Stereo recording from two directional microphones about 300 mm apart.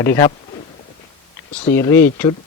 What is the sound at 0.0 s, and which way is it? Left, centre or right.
Speech, centre.